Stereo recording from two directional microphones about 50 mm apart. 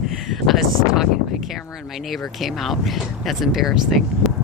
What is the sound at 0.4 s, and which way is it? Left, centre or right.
Speech, centre.